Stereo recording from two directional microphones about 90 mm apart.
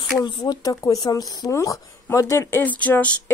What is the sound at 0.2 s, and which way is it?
Speech, 50° left (ahead or behind).